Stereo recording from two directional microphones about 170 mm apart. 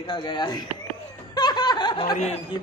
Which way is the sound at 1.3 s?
25° left (ahead or behind).